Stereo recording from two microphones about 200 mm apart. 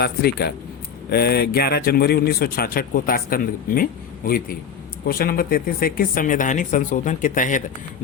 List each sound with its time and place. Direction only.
0.0 s speech: 50° left (ahead or behind)